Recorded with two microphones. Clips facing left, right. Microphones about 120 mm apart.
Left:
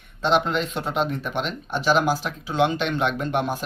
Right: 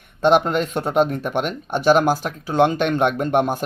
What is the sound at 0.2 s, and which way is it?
Speech, 50° right (ahead or behind).